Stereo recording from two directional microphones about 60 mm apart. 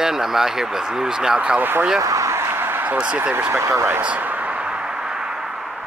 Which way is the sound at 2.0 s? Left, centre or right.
Right.